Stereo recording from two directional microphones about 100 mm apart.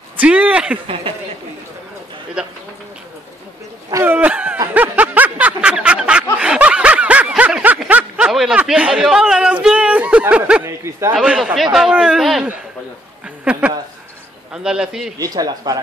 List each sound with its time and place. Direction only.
0.2 s a man's voice: 15° right (ahead or behind)
2.4 s a man's voice: 10° right (ahead or behind)
4.0 s a man's voice: 20° right (ahead or behind)
4.7 s a sound: 20° right (ahead or behind)
6.4 s snicker: 10° right (ahead or behind)
8.3 s a sound: 5° right (ahead or behind)
8.5 s speech: 10° right (ahead or behind)
10.6 s speech: 25° right (ahead or behind)
11.1 s a man's voice: 5° right (ahead or behind)
15.1 s speech: 40° right (ahead or behind)